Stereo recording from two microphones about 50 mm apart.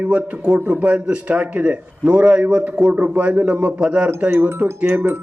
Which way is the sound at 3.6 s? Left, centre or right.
Right.